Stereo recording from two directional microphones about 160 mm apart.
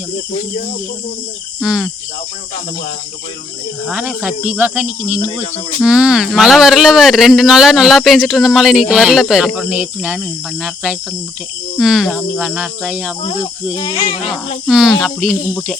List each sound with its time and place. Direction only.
1.6 s speech: 5° right (ahead or behind)
3.8 s speech: 5° right (ahead or behind)
11.8 s speech: centre (ahead or behind)
13.7 s speech: 30° left (ahead or behind)
14.7 s speech: 5° right (ahead or behind)